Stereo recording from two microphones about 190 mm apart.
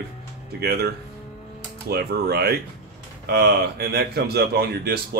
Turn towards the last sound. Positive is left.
turn(degrees=-55)  # may be behind; listen again after turning